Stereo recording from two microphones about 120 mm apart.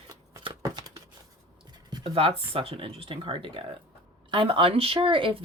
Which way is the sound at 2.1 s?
55° right (ahead or behind).